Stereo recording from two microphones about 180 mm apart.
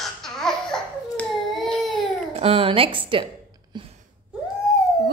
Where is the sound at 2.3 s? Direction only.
35° right (ahead or behind).